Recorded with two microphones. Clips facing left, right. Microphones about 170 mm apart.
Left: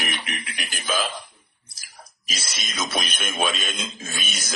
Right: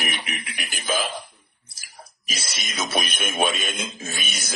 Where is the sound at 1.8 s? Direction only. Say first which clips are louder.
Right 2 dB; 55° right (ahead or behind).